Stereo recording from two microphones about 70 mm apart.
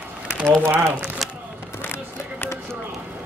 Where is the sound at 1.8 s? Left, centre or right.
Left.